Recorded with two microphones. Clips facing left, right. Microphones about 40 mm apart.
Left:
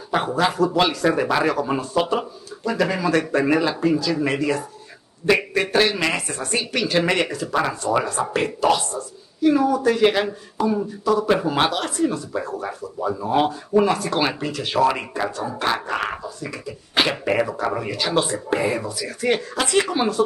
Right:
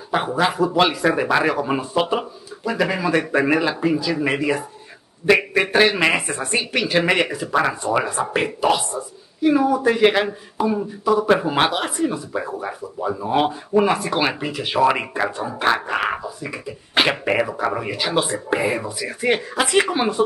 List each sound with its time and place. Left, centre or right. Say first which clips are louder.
0.1 s a man's voice: right 1 dB; centre